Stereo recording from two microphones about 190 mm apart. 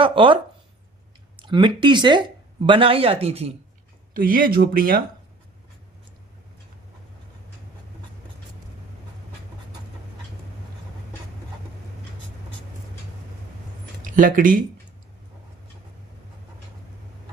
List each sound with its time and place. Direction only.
0.0 s speech: 25° right (ahead or behind)
1.4 s speech: 25° right (ahead or behind)
4.1 s speech: 50° right (ahead or behind)
14.1 s speech: 45° right (ahead or behind)